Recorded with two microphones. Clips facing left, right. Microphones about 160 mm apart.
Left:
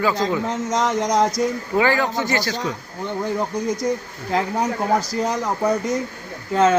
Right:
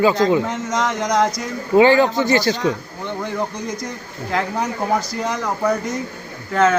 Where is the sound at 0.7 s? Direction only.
35° left (ahead or behind).